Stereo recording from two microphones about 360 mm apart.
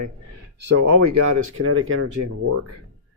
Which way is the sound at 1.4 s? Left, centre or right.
Right.